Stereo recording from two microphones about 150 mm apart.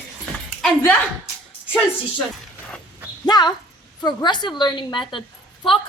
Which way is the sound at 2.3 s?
5° left (ahead or behind).